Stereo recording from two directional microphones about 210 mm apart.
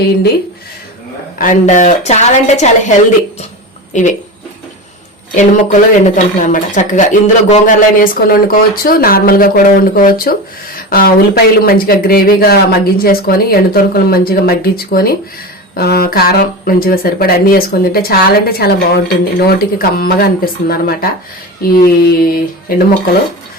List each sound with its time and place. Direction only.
1.4 s speech: 35° left (ahead or behind)
3.9 s speech: 35° left (ahead or behind)
5.3 s speech: 35° left (ahead or behind)